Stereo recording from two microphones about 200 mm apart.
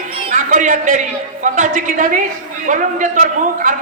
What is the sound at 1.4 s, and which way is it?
Music, 40° right (ahead or behind).